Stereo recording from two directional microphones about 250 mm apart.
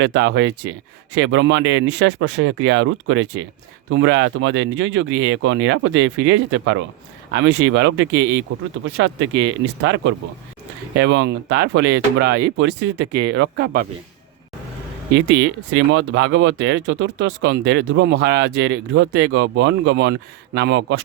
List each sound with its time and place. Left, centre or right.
0.0 s speech: right
15.1 s speech: right